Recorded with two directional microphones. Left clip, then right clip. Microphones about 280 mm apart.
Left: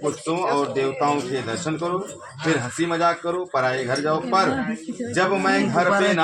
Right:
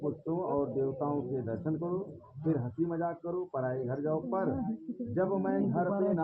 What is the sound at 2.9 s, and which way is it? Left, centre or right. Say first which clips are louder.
Speech: left 14 dB; left.